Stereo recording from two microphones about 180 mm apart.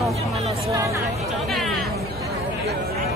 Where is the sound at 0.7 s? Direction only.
15° right (ahead or behind).